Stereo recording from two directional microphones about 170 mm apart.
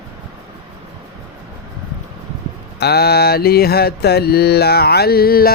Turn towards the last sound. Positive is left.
turn(degrees=60)  # may be behind; listen again after turning